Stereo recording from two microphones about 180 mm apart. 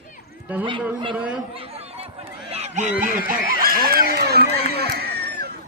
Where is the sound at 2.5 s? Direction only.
40° right (ahead or behind).